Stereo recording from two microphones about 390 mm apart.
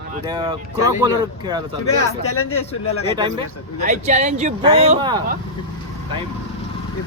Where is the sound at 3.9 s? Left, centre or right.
Centre.